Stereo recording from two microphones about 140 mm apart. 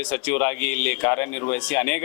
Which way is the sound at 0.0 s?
10° left (ahead or behind).